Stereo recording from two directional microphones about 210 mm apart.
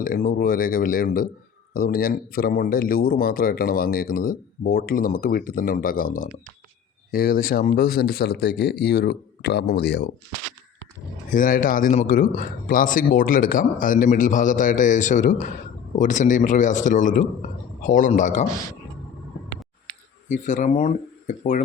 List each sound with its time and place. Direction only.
0.0 s speech: 40° left (ahead or behind)
11.3 s speech: 40° left (ahead or behind)
20.2 s speech: 35° left (ahead or behind)